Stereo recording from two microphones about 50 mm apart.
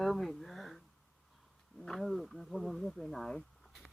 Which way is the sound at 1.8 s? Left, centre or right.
Centre.